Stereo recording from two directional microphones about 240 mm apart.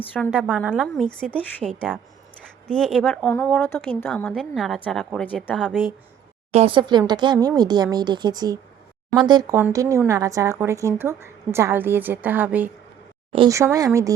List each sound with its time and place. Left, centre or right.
0.3 s a woman's voice: centre
6.5 s speech: right